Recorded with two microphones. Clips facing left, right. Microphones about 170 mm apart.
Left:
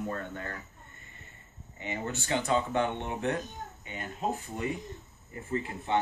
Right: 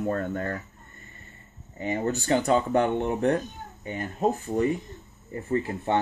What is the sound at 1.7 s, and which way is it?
Speech, 40° right (ahead or behind).